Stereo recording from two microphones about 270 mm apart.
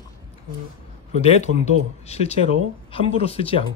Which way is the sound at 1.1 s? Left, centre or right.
Left.